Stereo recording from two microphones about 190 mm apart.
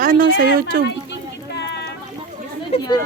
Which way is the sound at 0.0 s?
45° right (ahead or behind).